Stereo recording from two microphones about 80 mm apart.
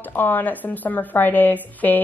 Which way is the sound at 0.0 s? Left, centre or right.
Left.